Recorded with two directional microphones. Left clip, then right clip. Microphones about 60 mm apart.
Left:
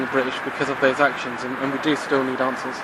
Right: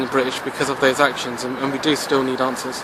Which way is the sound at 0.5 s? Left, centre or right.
Right.